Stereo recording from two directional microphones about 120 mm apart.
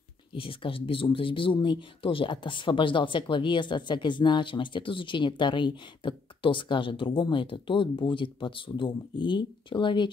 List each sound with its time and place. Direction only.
0.3 s speech: 45° left (ahead or behind)